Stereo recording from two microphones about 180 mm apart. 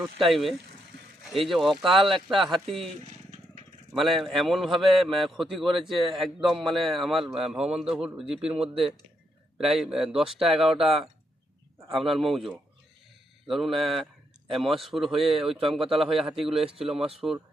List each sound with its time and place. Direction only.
0.2 s a man's voice: centre (ahead or behind)
3.9 s a man's voice: centre (ahead or behind)
8.5 s speech: 35° right (ahead or behind)
9.6 s a man's voice: centre (ahead or behind)
17.0 s speech: 30° right (ahead or behind)